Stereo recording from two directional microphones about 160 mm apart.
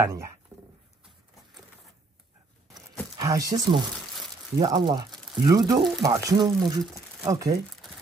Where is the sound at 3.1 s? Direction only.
20° right (ahead or behind).